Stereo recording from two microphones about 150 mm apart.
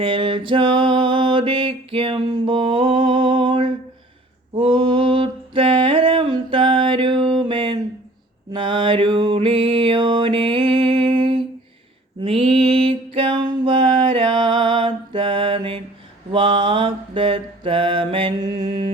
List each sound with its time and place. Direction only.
0.0 s mantra: 35° right (ahead or behind)
4.5 s a sound: 35° right (ahead or behind)
8.5 s mantra: 35° right (ahead or behind)
12.2 s music: 40° right (ahead or behind)
16.3 s mantra: 35° right (ahead or behind)